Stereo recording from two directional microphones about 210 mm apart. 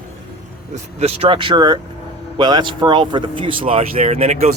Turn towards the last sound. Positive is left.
turn(degrees=-30)  # may be behind; listen again after turning